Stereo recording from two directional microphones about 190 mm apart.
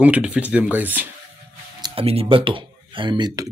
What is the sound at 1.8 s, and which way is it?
Speech, 30° right (ahead or behind).